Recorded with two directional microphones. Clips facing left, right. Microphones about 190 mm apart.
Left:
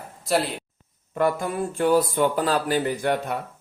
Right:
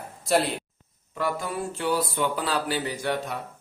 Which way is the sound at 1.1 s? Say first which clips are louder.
Left 5 dB; 50° left (ahead or behind).